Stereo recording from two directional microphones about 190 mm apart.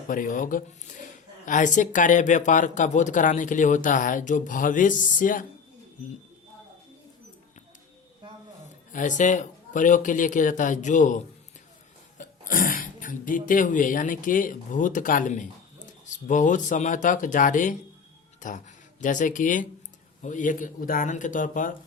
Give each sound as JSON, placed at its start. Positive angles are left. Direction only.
{"t": 0.1, "sound": "speech", "side_deg": 45}
{"t": 8.9, "sound": "a man's voice", "side_deg": 40}